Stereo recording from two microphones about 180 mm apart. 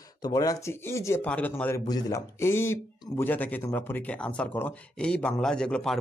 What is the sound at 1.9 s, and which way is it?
Speech, 20° left (ahead or behind).